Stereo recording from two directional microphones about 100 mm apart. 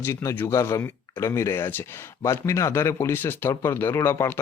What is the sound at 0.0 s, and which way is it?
Speech, 25° left (ahead or behind).